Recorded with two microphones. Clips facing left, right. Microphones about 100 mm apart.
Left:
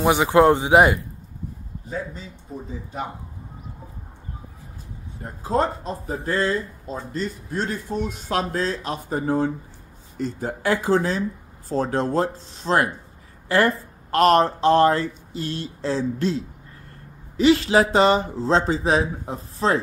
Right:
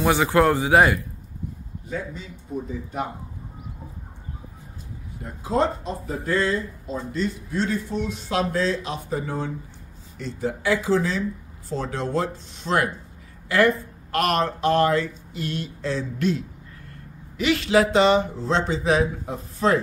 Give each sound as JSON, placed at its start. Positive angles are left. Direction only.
{"t": 0.0, "sound": "a man's voice", "side_deg": 20}
{"t": 1.9, "sound": "speech", "side_deg": 35}
{"t": 2.5, "sound": "speech", "side_deg": -10}
{"t": 5.2, "sound": "speech", "side_deg": 40}